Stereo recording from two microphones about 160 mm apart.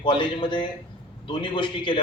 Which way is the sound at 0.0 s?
30° left (ahead or behind).